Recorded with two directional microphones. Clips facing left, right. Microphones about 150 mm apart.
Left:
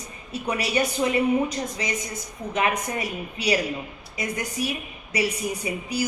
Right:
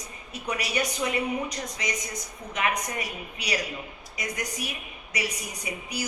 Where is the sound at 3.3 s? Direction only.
30° left (ahead or behind).